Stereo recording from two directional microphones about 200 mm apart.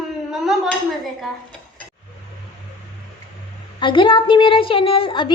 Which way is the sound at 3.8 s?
25° left (ahead or behind).